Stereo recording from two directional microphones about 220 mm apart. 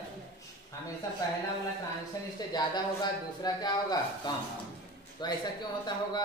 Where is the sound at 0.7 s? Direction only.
15° left (ahead or behind).